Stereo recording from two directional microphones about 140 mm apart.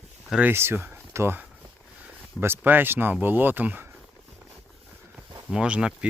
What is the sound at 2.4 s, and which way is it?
Speech, 15° right (ahead or behind).